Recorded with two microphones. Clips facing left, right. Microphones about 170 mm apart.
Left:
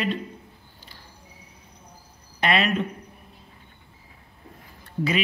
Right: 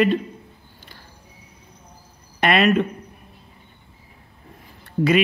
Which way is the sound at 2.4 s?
60° right (ahead or behind).